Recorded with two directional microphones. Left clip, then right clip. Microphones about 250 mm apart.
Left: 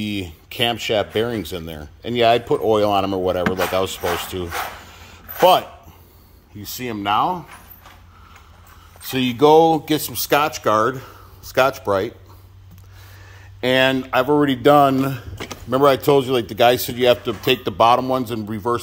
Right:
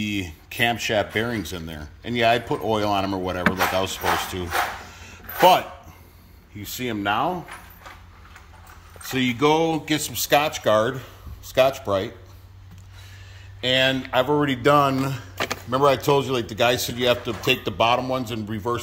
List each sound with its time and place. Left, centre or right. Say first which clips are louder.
0.0 s speech: left 1 dB; centre
5.0 s a sound: left 2 dB; centre
6.6 s speech: left 1 dB; centre
9.1 s speech: left 7 dB; centre
13.6 s speech: left 4 dB; centre